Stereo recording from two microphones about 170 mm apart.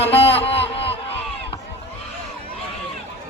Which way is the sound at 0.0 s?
35° left (ahead or behind).